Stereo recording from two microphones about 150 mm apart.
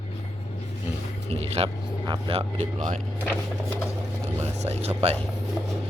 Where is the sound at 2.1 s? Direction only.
40° right (ahead or behind).